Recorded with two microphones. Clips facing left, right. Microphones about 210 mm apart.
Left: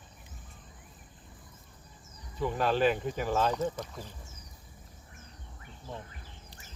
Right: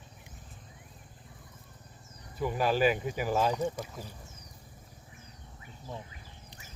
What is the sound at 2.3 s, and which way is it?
Speech, 10° right (ahead or behind).